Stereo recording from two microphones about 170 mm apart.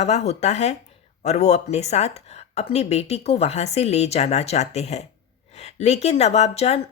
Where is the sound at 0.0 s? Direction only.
40° left (ahead or behind).